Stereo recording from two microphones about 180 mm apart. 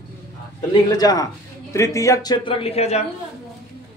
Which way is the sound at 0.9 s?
20° left (ahead or behind).